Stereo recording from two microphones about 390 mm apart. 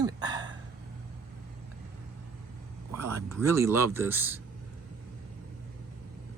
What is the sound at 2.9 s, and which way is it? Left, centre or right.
Speech, centre.